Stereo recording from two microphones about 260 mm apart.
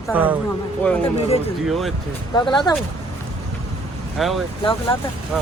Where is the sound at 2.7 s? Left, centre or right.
Centre.